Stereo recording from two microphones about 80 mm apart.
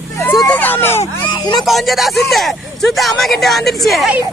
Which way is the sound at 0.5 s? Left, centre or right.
Left.